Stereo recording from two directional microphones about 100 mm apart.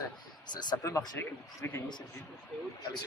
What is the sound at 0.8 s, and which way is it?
Speech, 25° left (ahead or behind).